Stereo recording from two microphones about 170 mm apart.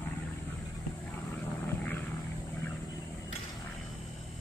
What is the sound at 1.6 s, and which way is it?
Vehicle, 10° left (ahead or behind).